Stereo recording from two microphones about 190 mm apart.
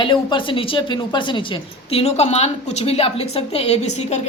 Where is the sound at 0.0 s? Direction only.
25° left (ahead or behind).